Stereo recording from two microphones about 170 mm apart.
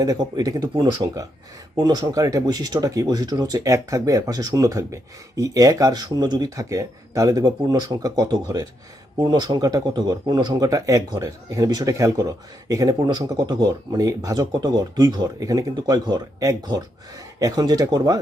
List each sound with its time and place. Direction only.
0.0 s speech: 20° right (ahead or behind)